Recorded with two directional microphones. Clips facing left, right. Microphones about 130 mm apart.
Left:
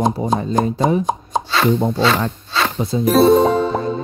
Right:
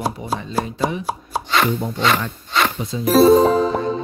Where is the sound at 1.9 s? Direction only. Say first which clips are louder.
Left 3 dB; 15° right (ahead or behind).